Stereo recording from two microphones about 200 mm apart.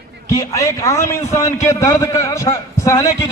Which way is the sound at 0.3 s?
15° left (ahead or behind).